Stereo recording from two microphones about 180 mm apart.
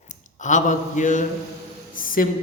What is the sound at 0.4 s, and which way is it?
Speech, 45° left (ahead or behind).